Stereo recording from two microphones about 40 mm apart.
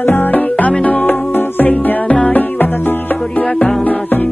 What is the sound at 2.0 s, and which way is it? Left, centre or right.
Music, left.